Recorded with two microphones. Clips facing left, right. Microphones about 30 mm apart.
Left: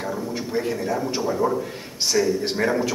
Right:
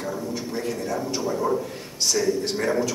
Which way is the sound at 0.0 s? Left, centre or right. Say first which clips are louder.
Left 2 dB; centre.